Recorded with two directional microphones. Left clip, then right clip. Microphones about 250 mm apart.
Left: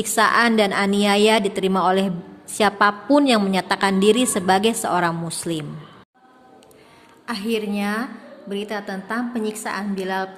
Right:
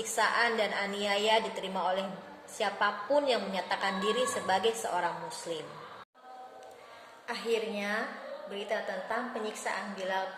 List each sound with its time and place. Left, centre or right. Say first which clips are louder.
0.2 s a woman's voice: left 11 dB; left
7.3 s a woman's voice: left 7 dB; left